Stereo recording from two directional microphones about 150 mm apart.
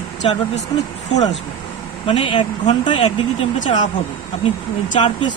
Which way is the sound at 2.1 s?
35° left (ahead or behind).